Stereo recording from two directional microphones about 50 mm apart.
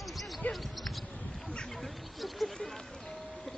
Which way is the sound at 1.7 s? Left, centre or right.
Centre.